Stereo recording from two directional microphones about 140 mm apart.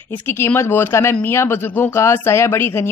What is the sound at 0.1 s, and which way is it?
Speech, 15° left (ahead or behind).